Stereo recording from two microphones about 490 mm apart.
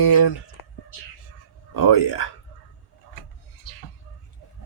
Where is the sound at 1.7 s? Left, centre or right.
Left.